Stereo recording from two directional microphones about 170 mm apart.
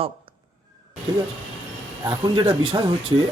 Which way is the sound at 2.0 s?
25° right (ahead or behind).